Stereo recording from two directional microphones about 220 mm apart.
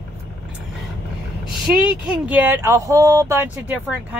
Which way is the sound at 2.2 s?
10° right (ahead or behind).